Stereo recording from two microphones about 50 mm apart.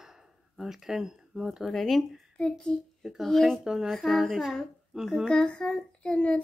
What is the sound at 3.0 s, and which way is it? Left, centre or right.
Speech, centre.